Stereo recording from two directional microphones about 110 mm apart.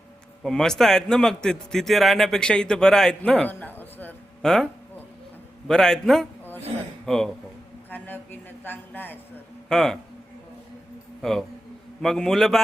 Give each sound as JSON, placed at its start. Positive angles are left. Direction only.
{"t": 0.4, "sound": "a man's voice", "side_deg": 5}
{"t": 3.5, "sound": "a sound", "side_deg": 15}
{"t": 4.4, "sound": "a man's voice", "side_deg": 5}
{"t": 7.9, "sound": "a woman's voice", "side_deg": 15}
{"t": 9.6, "sound": "a man's voice", "side_deg": 5}
{"t": 11.2, "sound": "a man's voice", "side_deg": 5}